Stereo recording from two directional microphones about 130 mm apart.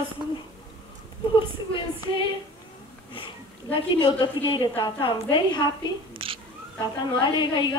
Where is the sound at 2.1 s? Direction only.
40° left (ahead or behind).